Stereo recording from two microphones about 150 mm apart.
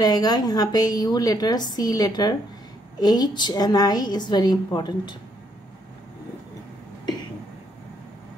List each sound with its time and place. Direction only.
0.0 s a woman's voice: 25° left (ahead or behind)